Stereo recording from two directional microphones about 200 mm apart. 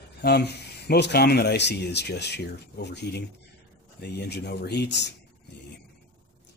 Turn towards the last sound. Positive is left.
turn(degrees=60)  # may be behind; listen again after turning